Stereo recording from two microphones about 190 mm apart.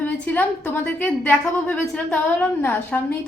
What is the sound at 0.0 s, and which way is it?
A woman's voice, 10° left (ahead or behind).